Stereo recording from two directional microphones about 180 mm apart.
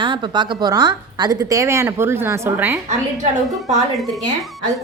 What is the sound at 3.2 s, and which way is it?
Speech, 40° right (ahead or behind).